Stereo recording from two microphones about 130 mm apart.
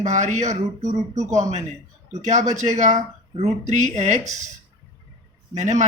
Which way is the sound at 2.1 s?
65° right (ahead or behind).